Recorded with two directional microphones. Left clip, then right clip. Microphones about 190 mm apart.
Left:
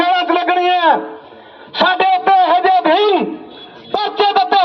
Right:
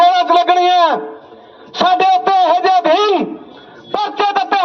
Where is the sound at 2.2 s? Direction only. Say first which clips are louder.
Left 1 dB; 40° right (ahead or behind).